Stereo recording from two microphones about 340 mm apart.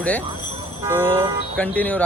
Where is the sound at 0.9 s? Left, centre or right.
Centre.